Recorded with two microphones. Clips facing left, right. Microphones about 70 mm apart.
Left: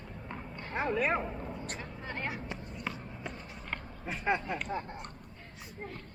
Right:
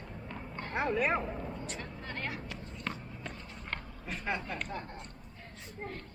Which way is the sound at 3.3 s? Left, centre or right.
Left.